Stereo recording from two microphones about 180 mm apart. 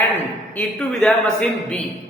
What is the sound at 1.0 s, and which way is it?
Speech, 5° left (ahead or behind).